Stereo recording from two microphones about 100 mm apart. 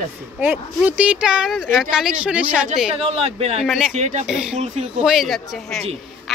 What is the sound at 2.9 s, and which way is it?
Speech, 90° right.